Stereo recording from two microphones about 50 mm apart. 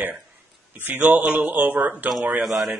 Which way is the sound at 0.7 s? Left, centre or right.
Right.